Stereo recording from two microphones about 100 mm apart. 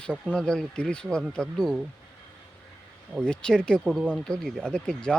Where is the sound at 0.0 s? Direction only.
10° left (ahead or behind).